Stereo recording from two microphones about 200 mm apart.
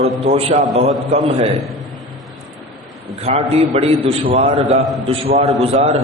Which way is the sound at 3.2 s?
30° right (ahead or behind).